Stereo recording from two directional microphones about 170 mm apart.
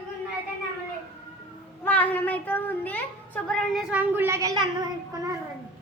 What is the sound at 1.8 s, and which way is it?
A woman's voice, 10° left (ahead or behind).